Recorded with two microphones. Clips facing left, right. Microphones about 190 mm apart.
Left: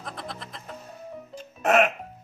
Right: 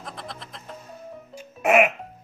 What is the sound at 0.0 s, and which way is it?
Music, centre (ahead or behind).